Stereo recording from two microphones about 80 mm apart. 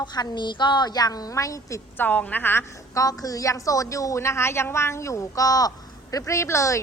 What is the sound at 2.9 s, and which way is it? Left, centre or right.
A woman's voice, left.